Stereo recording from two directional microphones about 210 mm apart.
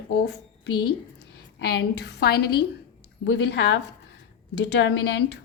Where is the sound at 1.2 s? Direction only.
50° left (ahead or behind).